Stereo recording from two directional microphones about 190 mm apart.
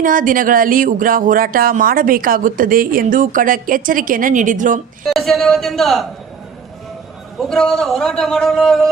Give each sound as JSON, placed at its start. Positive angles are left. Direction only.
{"t": 0.0, "sound": "speech", "side_deg": -45}
{"t": 5.0, "sound": "a man's voice", "side_deg": 0}
{"t": 7.4, "sound": "a man's voice", "side_deg": 5}